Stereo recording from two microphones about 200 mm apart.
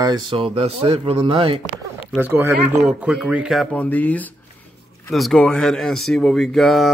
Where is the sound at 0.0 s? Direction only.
20° right (ahead or behind).